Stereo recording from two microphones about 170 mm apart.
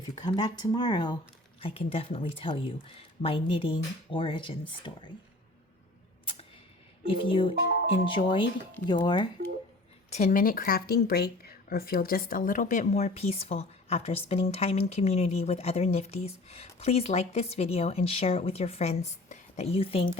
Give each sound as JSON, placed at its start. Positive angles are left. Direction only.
{"t": 0.3, "sound": "a woman's voice", "side_deg": 25}
{"t": 7.1, "sound": "a woman's voice", "side_deg": 30}
{"t": 10.1, "sound": "a woman's voice", "side_deg": 45}